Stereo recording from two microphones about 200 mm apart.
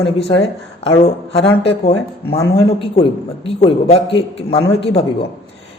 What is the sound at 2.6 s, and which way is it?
A man's voice, 30° left (ahead or behind).